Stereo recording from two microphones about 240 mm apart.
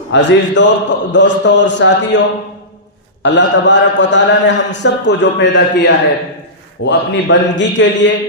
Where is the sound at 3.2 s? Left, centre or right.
Left.